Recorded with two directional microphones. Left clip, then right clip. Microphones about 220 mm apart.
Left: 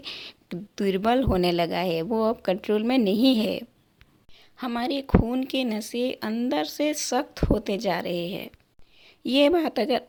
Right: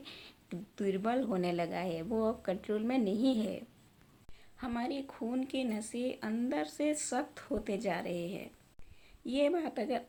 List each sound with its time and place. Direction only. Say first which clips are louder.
0.0 s a woman's voice: left 13 dB; 45° left (ahead or behind)